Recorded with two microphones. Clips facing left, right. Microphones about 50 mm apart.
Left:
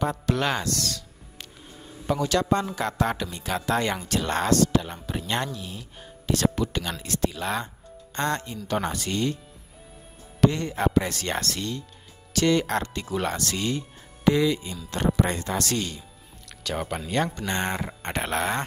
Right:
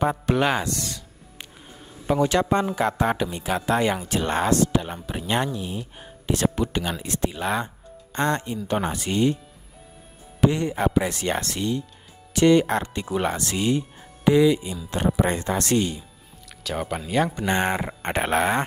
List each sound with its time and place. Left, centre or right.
0.0 s speech: centre
10.4 s speech: centre
16.6 s speech: centre
17.4 s speech: centre